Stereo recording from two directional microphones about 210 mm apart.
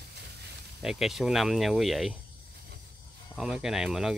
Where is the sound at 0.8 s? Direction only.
Centre (ahead or behind).